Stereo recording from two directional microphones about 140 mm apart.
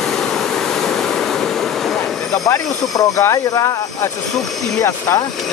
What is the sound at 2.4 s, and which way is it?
Speech, 20° left (ahead or behind).